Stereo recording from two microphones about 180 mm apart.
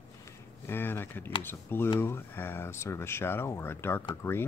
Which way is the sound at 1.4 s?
10° left (ahead or behind).